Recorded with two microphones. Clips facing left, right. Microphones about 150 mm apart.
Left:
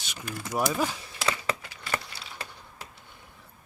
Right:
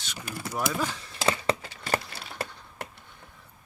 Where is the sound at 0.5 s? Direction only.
15° left (ahead or behind).